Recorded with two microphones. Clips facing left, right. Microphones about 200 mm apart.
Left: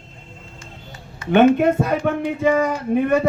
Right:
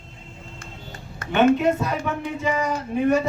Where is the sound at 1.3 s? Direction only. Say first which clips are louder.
Left 4 dB; 55° left (ahead or behind).